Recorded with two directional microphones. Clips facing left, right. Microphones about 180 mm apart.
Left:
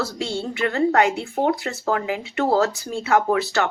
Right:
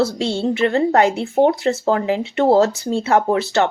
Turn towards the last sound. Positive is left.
turn(degrees=-25)  # may be behind; listen again after turning